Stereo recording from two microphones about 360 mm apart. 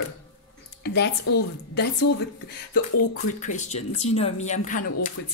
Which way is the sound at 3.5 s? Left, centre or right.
Centre.